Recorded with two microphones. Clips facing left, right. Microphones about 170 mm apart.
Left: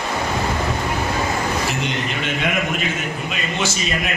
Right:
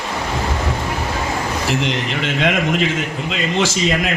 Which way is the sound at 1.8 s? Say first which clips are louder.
Right 3 dB; 90° right.